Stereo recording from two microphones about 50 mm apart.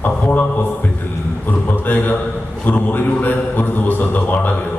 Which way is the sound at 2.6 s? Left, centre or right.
Left.